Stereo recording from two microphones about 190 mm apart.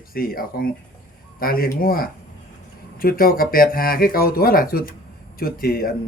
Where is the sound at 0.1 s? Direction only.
50° left (ahead or behind).